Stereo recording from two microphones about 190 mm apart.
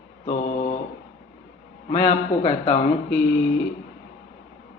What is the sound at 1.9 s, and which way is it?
Speech, 35° left (ahead or behind).